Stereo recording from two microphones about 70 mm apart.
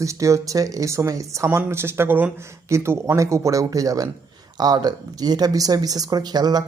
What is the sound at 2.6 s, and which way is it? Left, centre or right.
Speech, right.